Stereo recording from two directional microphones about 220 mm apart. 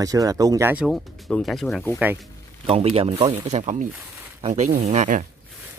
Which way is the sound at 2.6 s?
25° right (ahead or behind).